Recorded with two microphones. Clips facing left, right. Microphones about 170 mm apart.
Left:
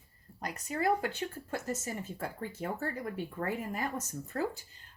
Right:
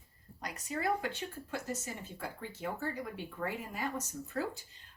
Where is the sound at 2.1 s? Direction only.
50° left (ahead or behind).